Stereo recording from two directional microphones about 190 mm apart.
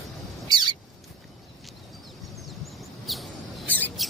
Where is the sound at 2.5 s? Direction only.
Centre (ahead or behind).